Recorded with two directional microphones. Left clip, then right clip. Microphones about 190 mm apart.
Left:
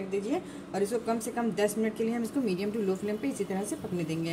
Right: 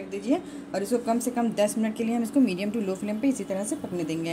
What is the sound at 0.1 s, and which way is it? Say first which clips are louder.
Speech: right 5 dB; 40° right (ahead or behind).